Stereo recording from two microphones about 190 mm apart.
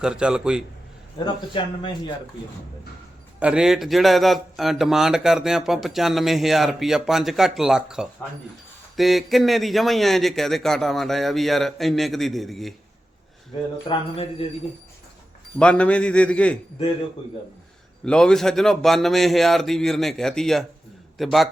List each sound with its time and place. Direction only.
0.0 s speech: 5° right (ahead or behind)
1.2 s speech: 25° left (ahead or behind)
3.4 s speech: 5° right (ahead or behind)
13.8 s speech: 30° left (ahead or behind)
15.5 s speech: 5° left (ahead or behind)
18.0 s speech: 5° left (ahead or behind)